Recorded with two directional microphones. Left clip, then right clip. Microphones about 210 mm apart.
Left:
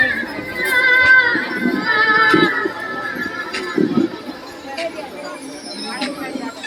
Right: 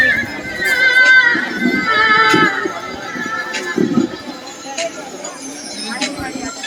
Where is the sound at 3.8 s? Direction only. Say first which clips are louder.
Even; 15° right (ahead or behind).